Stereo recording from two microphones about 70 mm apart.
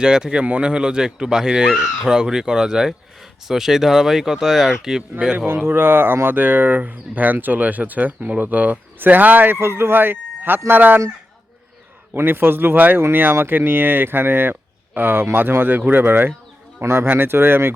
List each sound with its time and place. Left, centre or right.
0.0 s speech: centre
5.5 s speech: right
12.1 s speech: right